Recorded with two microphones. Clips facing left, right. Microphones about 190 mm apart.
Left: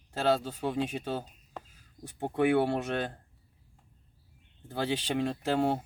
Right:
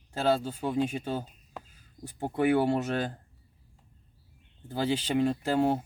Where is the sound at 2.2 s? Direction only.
5° right (ahead or behind).